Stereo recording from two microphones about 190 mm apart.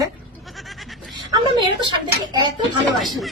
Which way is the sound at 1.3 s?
25° right (ahead or behind).